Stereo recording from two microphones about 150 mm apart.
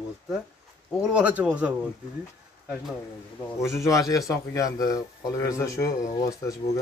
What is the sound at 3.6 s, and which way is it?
Speech, 20° left (ahead or behind).